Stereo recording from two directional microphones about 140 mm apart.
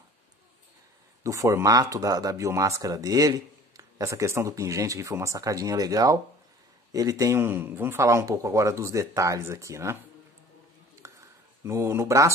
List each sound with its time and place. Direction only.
1.2 s speech: 20° right (ahead or behind)
11.0 s a sound: 20° right (ahead or behind)
11.6 s speech: 20° right (ahead or behind)